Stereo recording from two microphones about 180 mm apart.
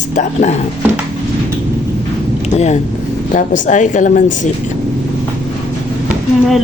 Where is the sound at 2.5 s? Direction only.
40° left (ahead or behind).